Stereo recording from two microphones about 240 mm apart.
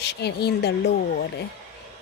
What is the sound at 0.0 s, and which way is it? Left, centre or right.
Speech, left.